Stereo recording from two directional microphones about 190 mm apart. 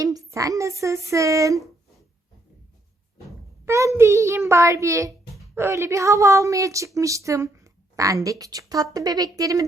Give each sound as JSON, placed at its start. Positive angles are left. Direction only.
{"t": 0.0, "sound": "a sound", "side_deg": -15}
{"t": 0.8, "sound": "a woman's voice", "side_deg": -15}
{"t": 3.7, "sound": "a woman's voice", "side_deg": -15}